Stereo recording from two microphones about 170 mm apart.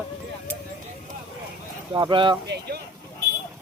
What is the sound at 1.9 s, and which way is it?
Speech, 30° right (ahead or behind).